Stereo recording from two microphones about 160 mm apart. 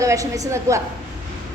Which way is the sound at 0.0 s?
20° right (ahead or behind).